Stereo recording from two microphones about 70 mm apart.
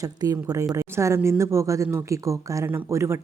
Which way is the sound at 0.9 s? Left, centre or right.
Right.